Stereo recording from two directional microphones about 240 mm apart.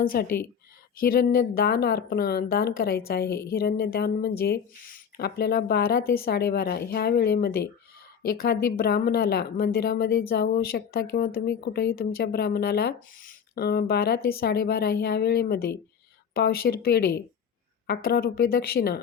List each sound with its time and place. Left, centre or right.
0.0 s speech: left